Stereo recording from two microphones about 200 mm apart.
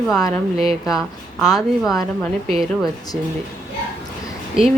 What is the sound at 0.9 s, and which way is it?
Speech, centre (ahead or behind).